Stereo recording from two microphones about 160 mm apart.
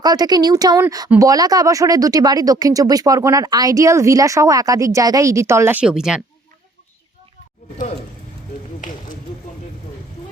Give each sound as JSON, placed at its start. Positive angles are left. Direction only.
{"t": 0.0, "sound": "speech", "side_deg": -25}